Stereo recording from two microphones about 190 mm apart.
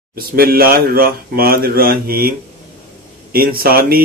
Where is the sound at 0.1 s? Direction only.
50° right (ahead or behind).